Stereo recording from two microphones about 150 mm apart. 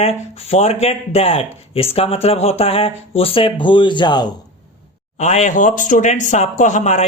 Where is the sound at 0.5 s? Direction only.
45° left (ahead or behind); by 4.3 s 30° left (ahead or behind).